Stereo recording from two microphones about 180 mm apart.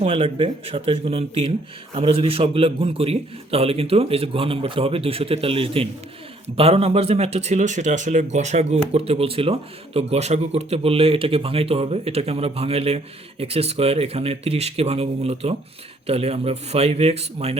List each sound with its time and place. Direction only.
0.0 s speech: 30° right (ahead or behind)